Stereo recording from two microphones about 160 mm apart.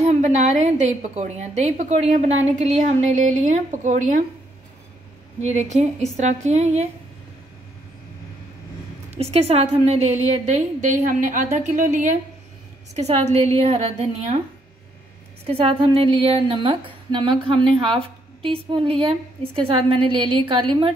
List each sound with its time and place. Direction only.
0.0 s a woman's voice: 45° right (ahead or behind)
5.4 s a woman's voice: 45° right (ahead or behind)
9.2 s a woman's voice: 40° right (ahead or behind)
12.9 s speech: 40° right (ahead or behind)
15.4 s speech: 35° right (ahead or behind)